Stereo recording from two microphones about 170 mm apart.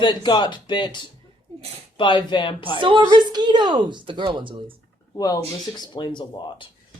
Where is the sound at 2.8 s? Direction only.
30° right (ahead or behind).